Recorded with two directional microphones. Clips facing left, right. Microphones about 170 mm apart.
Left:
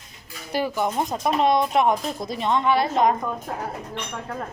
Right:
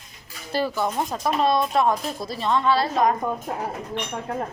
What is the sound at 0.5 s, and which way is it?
Speech, 15° left (ahead or behind).